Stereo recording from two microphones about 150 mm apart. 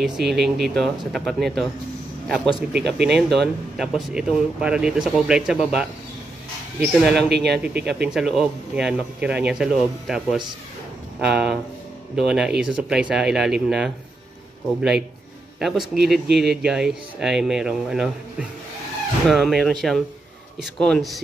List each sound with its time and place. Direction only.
0.0 s speech: centre (ahead or behind)
7.2 s speech: 90° right
8.0 s speech: 5° right (ahead or behind)
15.6 s speech: centre (ahead or behind)